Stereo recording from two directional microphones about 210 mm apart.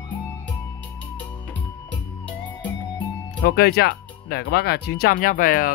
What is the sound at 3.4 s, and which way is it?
Speech, 50° left (ahead or behind).